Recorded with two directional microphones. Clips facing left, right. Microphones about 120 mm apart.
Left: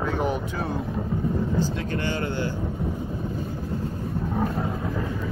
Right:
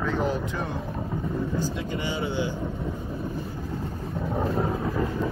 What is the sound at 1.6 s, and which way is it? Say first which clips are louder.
Vehicle: left 3 dB; 10° right (ahead or behind).